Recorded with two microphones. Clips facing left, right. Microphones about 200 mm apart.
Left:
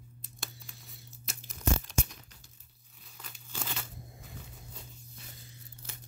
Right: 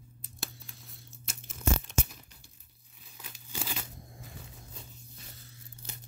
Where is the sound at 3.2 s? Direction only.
10° right (ahead or behind).